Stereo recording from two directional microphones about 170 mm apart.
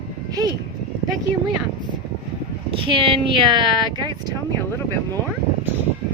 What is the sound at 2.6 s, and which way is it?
Speech, 30° right (ahead or behind).